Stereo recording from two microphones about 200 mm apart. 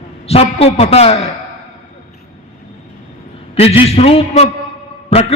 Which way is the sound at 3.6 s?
30° left (ahead or behind).